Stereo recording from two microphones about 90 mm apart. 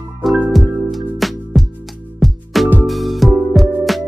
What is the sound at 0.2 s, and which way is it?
Music, centre (ahead or behind).